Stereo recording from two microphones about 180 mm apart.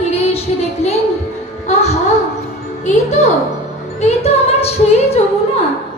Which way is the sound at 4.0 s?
35° left (ahead or behind).